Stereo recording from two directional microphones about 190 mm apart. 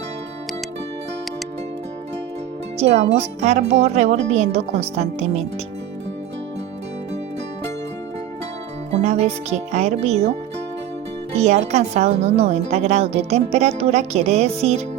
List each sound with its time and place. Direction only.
2.7 s a woman's voice: 35° right (ahead or behind)
9.0 s a woman's voice: 35° right (ahead or behind)
11.3 s a woman's voice: 35° right (ahead or behind)